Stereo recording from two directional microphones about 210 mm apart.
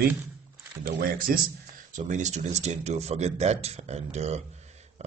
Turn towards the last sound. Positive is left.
turn(degrees=-30)  # may be behind; listen again after turning